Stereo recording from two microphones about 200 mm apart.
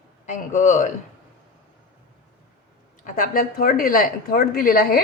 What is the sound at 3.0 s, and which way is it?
A woman's voice, 45° left (ahead or behind).